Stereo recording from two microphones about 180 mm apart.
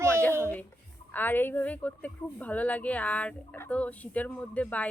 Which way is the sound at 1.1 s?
10° left (ahead or behind).